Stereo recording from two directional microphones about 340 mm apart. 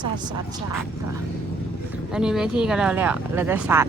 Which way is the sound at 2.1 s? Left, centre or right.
Centre.